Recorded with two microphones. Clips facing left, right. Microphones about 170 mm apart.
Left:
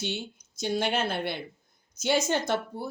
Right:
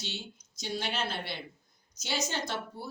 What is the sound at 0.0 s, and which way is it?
A woman's voice, 55° left (ahead or behind).